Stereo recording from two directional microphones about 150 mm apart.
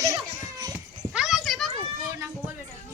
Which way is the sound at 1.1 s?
5° right (ahead or behind).